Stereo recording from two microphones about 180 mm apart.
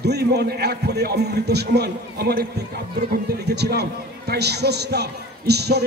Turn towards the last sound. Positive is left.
turn(degrees=-65)  # may be behind; listen again after turning